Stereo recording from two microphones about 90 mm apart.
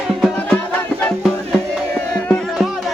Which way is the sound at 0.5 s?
20° left (ahead or behind).